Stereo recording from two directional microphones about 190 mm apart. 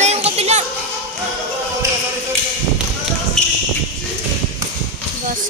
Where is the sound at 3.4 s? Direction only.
Centre (ahead or behind).